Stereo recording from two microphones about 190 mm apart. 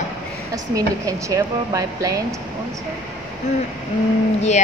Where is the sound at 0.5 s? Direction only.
15° right (ahead or behind).